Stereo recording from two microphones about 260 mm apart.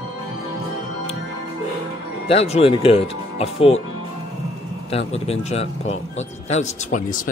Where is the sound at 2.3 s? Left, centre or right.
Left.